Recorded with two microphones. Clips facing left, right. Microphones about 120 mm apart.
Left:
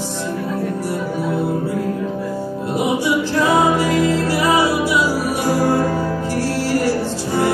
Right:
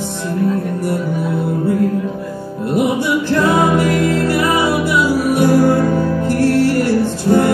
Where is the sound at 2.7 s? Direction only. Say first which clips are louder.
Right 3 dB; 55° right (ahead or behind).